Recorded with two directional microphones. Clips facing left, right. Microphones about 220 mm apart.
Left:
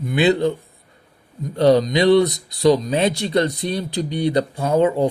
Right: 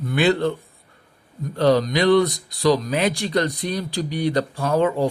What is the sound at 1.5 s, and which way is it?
Speech, 20° left (ahead or behind).